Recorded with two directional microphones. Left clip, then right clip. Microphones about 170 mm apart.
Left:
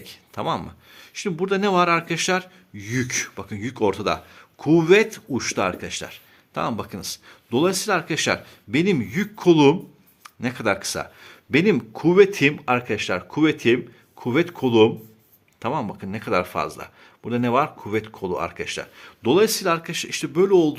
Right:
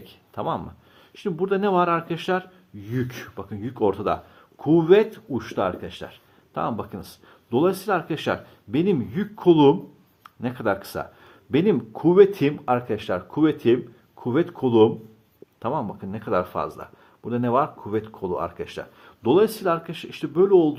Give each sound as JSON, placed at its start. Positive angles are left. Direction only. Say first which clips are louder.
{"t": 0.0, "sound": "speech", "louder": "left 1 dB", "side_deg": 15}